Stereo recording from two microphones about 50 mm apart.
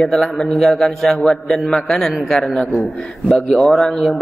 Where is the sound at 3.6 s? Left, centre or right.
Centre.